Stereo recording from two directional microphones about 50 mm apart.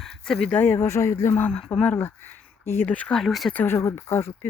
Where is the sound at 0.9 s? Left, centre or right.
Left.